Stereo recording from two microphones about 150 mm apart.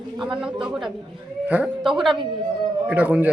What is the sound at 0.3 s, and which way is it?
A man's voice, 5° right (ahead or behind).